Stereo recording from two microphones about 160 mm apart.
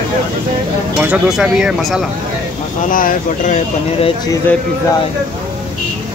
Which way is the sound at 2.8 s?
60° left (ahead or behind).